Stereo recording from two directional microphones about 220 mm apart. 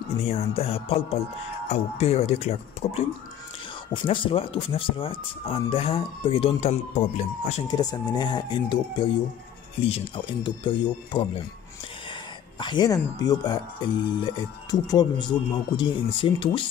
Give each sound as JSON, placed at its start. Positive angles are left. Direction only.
{"t": 0.3, "sound": "speech", "side_deg": 30}
{"t": 7.6, "sound": "speech", "side_deg": 20}